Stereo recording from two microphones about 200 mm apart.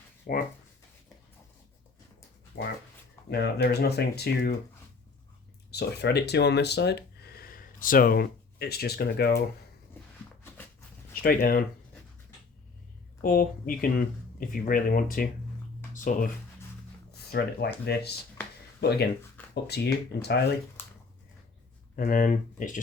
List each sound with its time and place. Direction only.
0.3 s speech: 45° left (ahead or behind)
2.5 s speech: 60° left (ahead or behind)
5.7 s speech: 55° left (ahead or behind)
11.1 s speech: 45° left (ahead or behind)
13.2 s speech: 45° left (ahead or behind)
17.1 s a sound: 55° left (ahead or behind)
17.8 s speech: 55° left (ahead or behind)
21.9 s speech: 45° left (ahead or behind)